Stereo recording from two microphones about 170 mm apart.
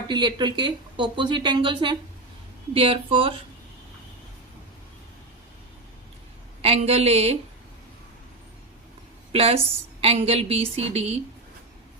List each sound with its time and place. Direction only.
0.1 s a woman's voice: 25° right (ahead or behind)
6.6 s a woman's voice: 35° right (ahead or behind)
9.3 s a woman's voice: 35° right (ahead or behind)